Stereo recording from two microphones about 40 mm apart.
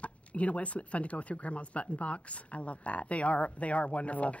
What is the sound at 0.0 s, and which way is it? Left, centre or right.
Speech, left.